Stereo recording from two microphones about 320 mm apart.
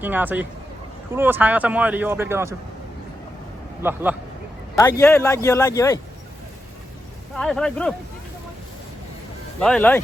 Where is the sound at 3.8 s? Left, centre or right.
Centre.